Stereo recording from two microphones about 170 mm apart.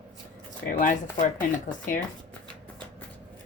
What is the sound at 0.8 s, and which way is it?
Speech, 50° left (ahead or behind).